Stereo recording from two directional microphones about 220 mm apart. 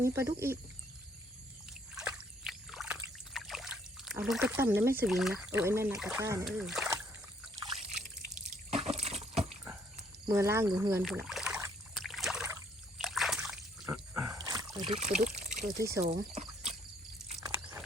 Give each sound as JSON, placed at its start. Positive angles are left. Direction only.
{"t": 0.0, "sound": "speech", "side_deg": -10}
{"t": 2.0, "sound": "trickle", "side_deg": -5}
{"t": 5.5, "sound": "speech", "side_deg": -10}
{"t": 6.9, "sound": "boat", "side_deg": -10}
{"t": 8.7, "sound": "a sound", "side_deg": -30}
{"t": 10.2, "sound": "speech", "side_deg": -15}
{"t": 11.0, "sound": "rowboat", "side_deg": 0}
{"t": 13.0, "sound": "splash", "side_deg": 0}
{"t": 13.8, "sound": "a sound", "side_deg": -10}
{"t": 15.2, "sound": "trickle", "side_deg": -35}
{"t": 15.7, "sound": "speech", "side_deg": -15}
{"t": 16.0, "sound": "a sound", "side_deg": -30}
{"t": 17.6, "sound": "a sound", "side_deg": -5}